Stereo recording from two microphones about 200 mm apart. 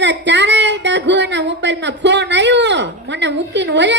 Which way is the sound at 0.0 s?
60° right (ahead or behind).